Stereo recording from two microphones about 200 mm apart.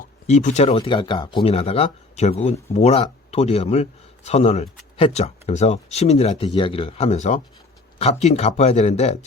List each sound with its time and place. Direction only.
0.0 s speech: 35° left (ahead or behind)